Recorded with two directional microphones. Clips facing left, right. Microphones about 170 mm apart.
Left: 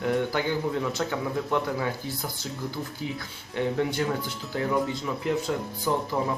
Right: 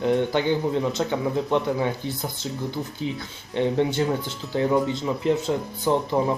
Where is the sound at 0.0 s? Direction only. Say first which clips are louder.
Right 4 dB; 25° right (ahead or behind).